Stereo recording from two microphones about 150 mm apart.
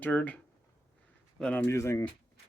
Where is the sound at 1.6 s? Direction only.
20° left (ahead or behind).